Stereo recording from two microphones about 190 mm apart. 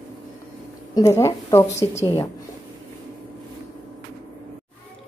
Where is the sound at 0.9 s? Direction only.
15° left (ahead or behind).